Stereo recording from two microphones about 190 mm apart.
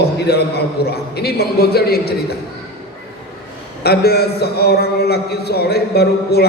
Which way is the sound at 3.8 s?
55° left (ahead or behind).